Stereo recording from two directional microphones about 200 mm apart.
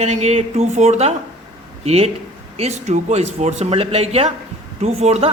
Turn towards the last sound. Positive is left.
turn(degrees=-30)  # may be behind; listen again after turning